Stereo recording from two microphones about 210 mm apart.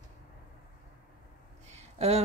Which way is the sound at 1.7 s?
30° right (ahead or behind).